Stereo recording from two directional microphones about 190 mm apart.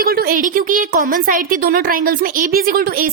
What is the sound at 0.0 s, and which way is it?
A woman's voice, 50° right (ahead or behind).